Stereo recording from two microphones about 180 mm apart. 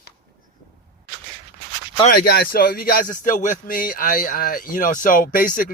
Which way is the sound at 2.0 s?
60° left (ahead or behind).